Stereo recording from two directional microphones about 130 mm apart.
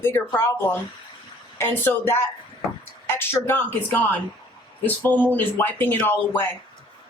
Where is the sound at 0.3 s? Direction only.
15° left (ahead or behind).